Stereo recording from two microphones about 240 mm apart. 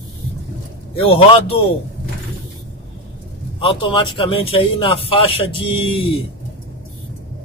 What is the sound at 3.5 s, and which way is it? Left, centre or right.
A man's voice, left.